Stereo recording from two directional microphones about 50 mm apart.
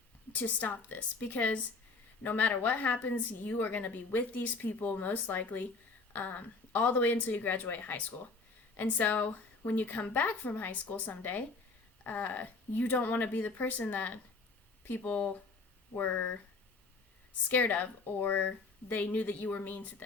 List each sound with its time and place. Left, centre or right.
0.3 s a woman's voice: left
17.5 s a woman's voice: left